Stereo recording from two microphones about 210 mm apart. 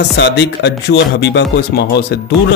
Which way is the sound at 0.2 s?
55° left (ahead or behind).